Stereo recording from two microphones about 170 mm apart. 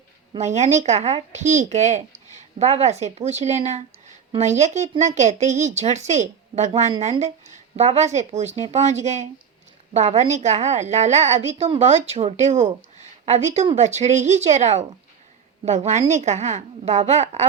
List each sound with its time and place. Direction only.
0.3 s a woman's voice: 40° right (ahead or behind)